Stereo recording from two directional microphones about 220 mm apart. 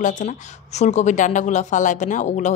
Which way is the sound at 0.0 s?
35° left (ahead or behind).